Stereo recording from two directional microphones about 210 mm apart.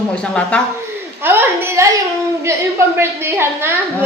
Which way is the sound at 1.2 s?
10° right (ahead or behind).